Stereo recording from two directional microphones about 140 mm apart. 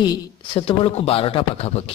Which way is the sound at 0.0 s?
35° left (ahead or behind).